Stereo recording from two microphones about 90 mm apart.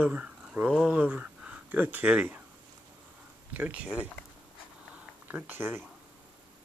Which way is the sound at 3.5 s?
15° right (ahead or behind).